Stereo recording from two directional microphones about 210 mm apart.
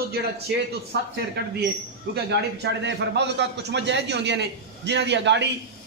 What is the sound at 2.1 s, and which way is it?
A man's voice, 55° right (ahead or behind).